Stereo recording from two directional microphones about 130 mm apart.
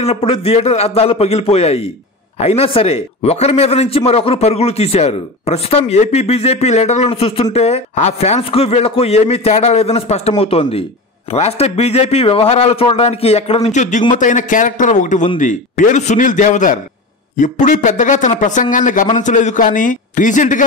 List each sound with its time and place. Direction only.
0.0 s a man's voice: 50° left (ahead or behind); by 14.0 s 65° left (ahead or behind)
14.1 s a man's voice: 80° left
19.1 s a man's voice: 70° left (ahead or behind)